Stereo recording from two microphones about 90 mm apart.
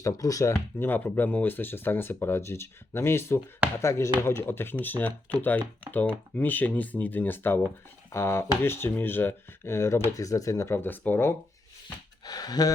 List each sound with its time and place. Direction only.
0.0 s speech: 40° left (ahead or behind)
0.8 s speech: 25° left (ahead or behind)
12.2 s speech: 45° left (ahead or behind)